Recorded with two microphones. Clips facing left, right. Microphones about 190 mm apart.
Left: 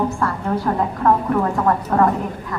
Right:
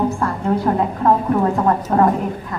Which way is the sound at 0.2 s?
25° right (ahead or behind).